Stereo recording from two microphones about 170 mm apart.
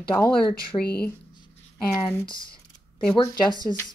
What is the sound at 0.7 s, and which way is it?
Speech, 15° left (ahead or behind).